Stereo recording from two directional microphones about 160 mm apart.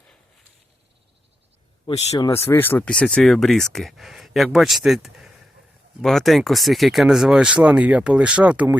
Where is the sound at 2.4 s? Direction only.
15° left (ahead or behind).